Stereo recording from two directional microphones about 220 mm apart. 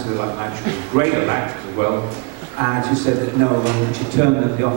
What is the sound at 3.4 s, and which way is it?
Speech, 25° right (ahead or behind).